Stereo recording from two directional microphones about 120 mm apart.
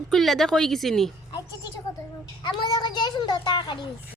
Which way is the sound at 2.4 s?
40° left (ahead or behind).